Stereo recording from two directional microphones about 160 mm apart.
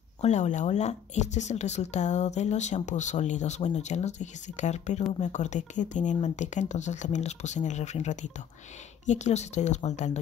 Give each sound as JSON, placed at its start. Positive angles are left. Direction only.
{"t": 0.2, "sound": "speech", "side_deg": 45}